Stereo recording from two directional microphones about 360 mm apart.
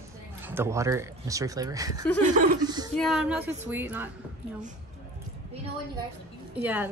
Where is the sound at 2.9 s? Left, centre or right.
Centre.